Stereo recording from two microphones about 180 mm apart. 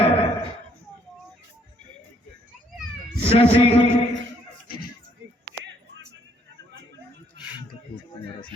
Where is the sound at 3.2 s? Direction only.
30° left (ahead or behind).